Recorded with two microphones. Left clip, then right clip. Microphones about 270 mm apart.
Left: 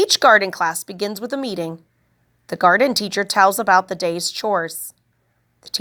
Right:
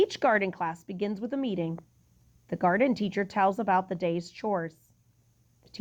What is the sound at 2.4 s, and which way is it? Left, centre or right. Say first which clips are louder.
A woman's voice: left 11 dB; centre.